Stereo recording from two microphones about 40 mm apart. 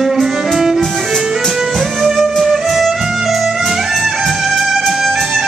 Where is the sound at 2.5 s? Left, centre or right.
Centre.